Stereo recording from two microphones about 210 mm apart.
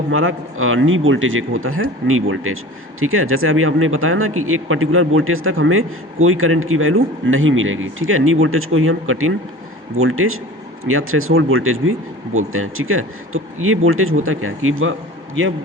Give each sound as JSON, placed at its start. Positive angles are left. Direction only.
{"t": 0.1, "sound": "a man's voice", "side_deg": -75}